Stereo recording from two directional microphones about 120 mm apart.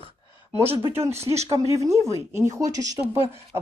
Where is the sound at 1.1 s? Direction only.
60° right (ahead or behind).